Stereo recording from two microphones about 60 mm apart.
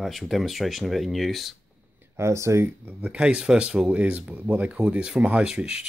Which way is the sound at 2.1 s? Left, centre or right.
Right.